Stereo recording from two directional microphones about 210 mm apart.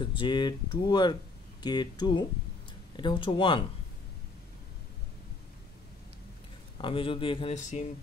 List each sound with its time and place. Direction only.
0.0 s speech: 25° left (ahead or behind)
6.8 s speech: 25° left (ahead or behind)